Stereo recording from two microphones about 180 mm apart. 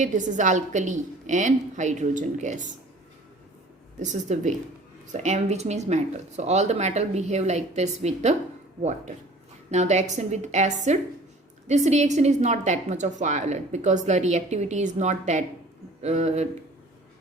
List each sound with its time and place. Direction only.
0.0 s a woman's voice: 45° right (ahead or behind)
4.0 s a woman's voice: 40° right (ahead or behind)
9.6 s a woman's voice: 40° right (ahead or behind)